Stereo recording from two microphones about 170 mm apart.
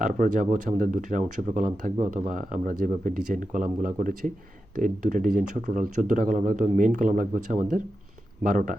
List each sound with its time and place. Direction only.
0.0 s speech: 50° right (ahead or behind)